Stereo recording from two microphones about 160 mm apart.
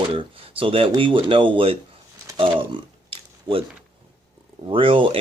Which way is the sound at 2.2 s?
30° right (ahead or behind).